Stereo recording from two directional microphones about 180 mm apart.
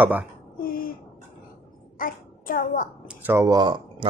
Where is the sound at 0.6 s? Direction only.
55° left (ahead or behind).